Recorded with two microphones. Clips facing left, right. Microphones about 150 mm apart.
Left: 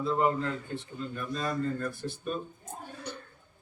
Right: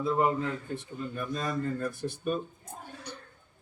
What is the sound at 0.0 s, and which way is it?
Speech, 10° right (ahead or behind).